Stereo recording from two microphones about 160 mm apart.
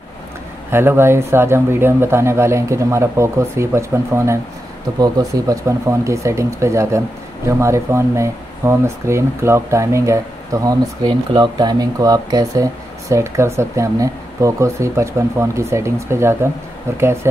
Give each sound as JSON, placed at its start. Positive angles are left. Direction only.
{"t": 0.7, "sound": "speech", "side_deg": -15}